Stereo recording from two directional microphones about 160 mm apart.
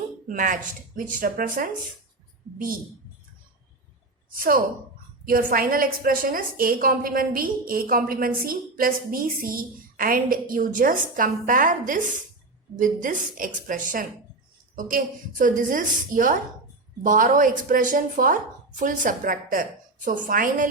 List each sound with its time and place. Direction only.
0.3 s a woman's voice: 55° right (ahead or behind)
4.4 s a woman's voice: 65° right (ahead or behind)